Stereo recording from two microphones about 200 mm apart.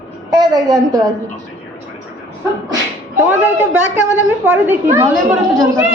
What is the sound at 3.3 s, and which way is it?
A woman's voice, 10° right (ahead or behind).